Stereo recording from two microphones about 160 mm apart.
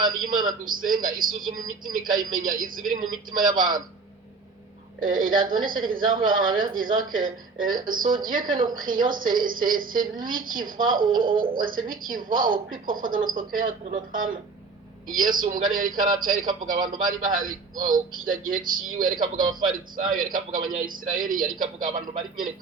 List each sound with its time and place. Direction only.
0.3 s a woman's voice: 60° right (ahead or behind)
5.0 s a woman's voice: 60° right (ahead or behind)
19.2 s speech: 30° right (ahead or behind)
19.5 s a woman's voice: 60° right (ahead or behind)